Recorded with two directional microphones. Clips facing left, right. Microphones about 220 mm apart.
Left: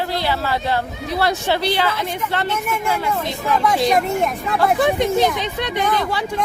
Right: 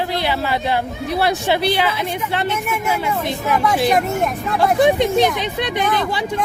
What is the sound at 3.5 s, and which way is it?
Speech, centre (ahead or behind).